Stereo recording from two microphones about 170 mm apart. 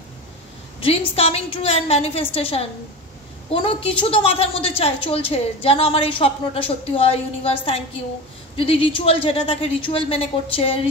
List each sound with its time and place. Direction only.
0.7 s a woman's voice: 35° left (ahead or behind)